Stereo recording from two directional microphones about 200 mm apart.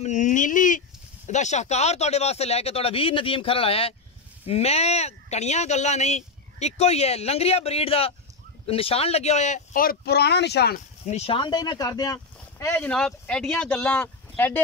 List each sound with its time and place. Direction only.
0.0 s speech: 35° left (ahead or behind); by 10.8 s 55° left (ahead or behind)
11.1 s speech: 30° left (ahead or behind); by 14.6 s 10° left (ahead or behind)